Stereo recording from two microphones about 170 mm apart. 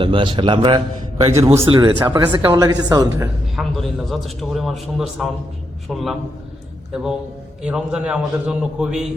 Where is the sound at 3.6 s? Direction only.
Centre (ahead or behind).